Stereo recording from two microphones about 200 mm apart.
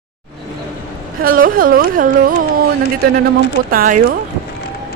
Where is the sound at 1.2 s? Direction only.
45° right (ahead or behind).